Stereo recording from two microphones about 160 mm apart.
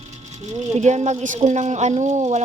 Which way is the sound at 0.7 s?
45° right (ahead or behind).